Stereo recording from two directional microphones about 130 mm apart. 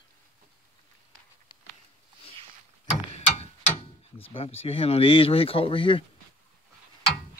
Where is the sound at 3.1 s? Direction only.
50° left (ahead or behind).